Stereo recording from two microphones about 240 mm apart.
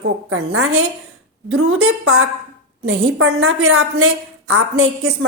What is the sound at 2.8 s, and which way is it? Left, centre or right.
A woman's voice, right.